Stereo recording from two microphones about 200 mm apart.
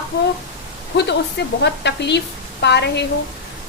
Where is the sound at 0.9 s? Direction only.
60° left (ahead or behind).